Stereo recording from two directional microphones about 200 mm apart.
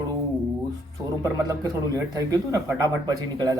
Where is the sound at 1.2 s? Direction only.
15° right (ahead or behind).